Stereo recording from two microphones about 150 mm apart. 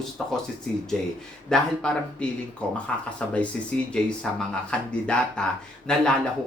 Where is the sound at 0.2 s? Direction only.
5° left (ahead or behind).